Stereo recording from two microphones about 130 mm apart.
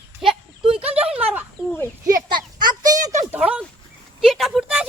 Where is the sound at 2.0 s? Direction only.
35° right (ahead or behind).